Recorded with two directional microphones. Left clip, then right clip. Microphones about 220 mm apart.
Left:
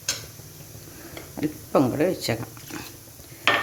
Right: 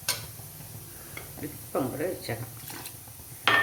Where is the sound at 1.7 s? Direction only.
50° left (ahead or behind).